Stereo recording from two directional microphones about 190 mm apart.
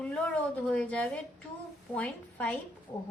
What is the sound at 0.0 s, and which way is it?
A woman's voice, 5° left (ahead or behind).